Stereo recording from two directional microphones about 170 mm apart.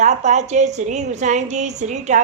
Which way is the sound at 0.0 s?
45° right (ahead or behind).